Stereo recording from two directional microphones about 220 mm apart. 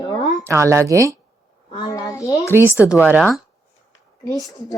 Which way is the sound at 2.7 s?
15° left (ahead or behind).